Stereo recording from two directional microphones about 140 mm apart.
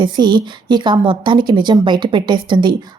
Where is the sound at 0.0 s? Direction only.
30° right (ahead or behind).